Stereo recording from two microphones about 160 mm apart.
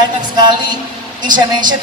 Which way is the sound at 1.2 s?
30° right (ahead or behind).